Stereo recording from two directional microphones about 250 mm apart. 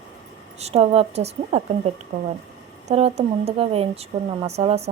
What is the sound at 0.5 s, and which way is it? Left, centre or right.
A woman's voice, right.